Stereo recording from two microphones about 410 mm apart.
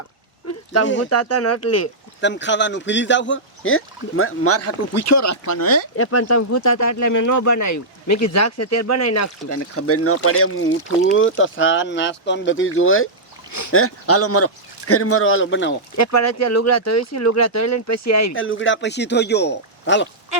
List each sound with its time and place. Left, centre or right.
0.4 s speech: left
2.2 s speech: left
13.5 s speech: left
16.0 s speech: left